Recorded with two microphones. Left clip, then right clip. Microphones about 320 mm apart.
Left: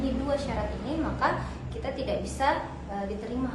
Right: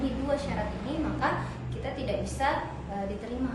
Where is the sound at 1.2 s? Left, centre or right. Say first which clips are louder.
Left 2 dB; centre.